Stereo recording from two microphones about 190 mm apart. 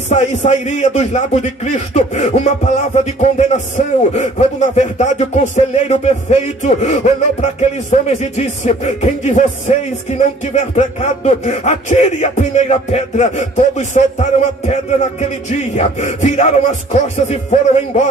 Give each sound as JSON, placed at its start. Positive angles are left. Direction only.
{"t": 0.1, "sound": "a man's voice", "side_deg": 40}